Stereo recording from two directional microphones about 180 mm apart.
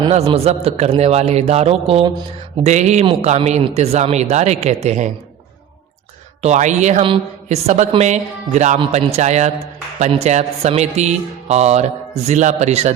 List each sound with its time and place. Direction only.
0.0 s a man's voice: 35° right (ahead or behind)
2.6 s a man's voice: 40° right (ahead or behind)
6.4 s a man's voice: 40° right (ahead or behind)